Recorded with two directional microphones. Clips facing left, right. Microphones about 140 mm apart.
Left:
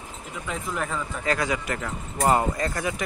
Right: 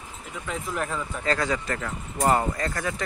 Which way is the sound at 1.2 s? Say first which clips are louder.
Even; 15° left (ahead or behind).